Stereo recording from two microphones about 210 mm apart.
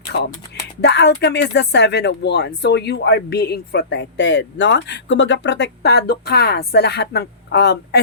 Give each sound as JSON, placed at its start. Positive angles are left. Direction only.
{"t": 0.1, "sound": "speech", "side_deg": 55}